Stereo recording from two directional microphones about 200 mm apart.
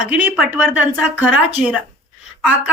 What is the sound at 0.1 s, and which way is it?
Speech, 10° right (ahead or behind).